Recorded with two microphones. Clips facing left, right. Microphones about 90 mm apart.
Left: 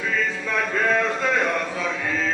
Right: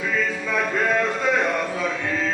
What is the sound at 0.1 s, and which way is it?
Music, 5° right (ahead or behind).